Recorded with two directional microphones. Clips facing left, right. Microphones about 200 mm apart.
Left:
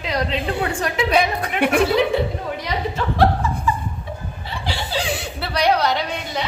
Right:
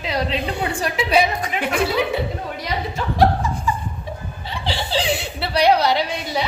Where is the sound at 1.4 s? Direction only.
60° left (ahead or behind).